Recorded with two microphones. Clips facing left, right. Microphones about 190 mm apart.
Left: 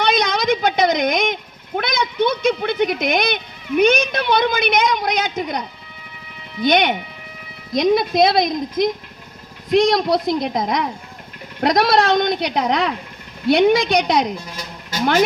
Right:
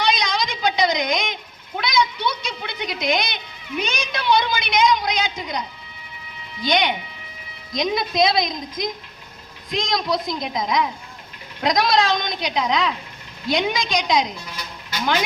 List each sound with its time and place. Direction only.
0.0 s speech: 55° left (ahead or behind)
14.4 s bleat: 45° left (ahead or behind)